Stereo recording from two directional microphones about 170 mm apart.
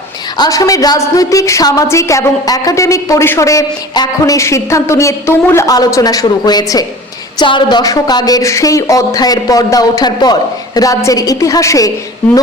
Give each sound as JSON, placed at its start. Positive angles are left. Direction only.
{"t": 0.3, "sound": "a woman's voice", "side_deg": 20}